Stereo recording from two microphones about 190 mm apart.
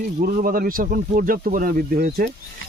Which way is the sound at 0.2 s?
50° right (ahead or behind).